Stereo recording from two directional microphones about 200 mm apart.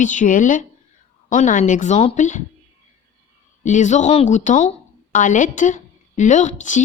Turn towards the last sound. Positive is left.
turn(degrees=40)  # may be behind; listen again after turning